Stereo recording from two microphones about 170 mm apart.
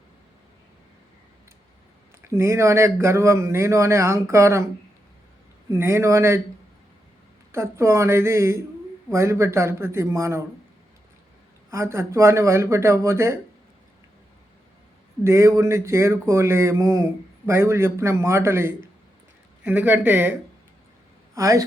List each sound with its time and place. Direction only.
2.2 s speech: 15° right (ahead or behind)
5.7 s speech: 15° right (ahead or behind)
7.5 s speech: 15° right (ahead or behind)
11.7 s speech: 15° right (ahead or behind)
15.2 s speech: 15° right (ahead or behind)
21.3 s a man's voice: 20° right (ahead or behind)